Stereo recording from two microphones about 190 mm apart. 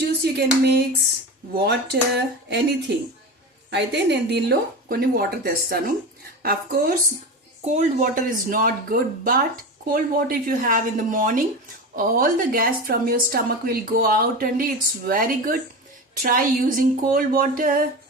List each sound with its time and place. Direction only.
0.3 s speech: 60° right (ahead or behind)
3.7 s a woman's voice: 65° right (ahead or behind)
7.6 s a woman's voice: 35° right (ahead or behind)